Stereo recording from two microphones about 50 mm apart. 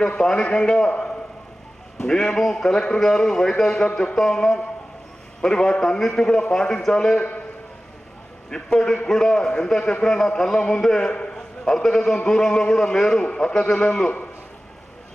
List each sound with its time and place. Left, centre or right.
0.2 s a man's voice: centre
8.5 s a man's voice: centre
13.2 s a man's voice: left